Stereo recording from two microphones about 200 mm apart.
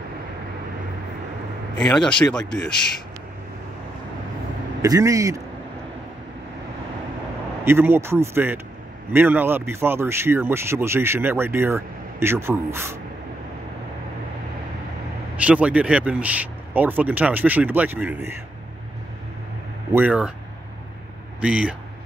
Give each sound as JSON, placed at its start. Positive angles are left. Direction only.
{"t": 1.9, "sound": "speech", "side_deg": 5}
{"t": 4.8, "sound": "speech", "side_deg": -15}
{"t": 7.6, "sound": "speech", "side_deg": -10}
{"t": 15.3, "sound": "speech", "side_deg": -5}
{"t": 19.9, "sound": "speech", "side_deg": -10}
{"t": 21.4, "sound": "speech", "side_deg": -5}